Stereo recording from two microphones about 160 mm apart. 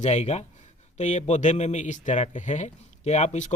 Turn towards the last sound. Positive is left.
turn(degrees=45)  # may be behind; listen again after turning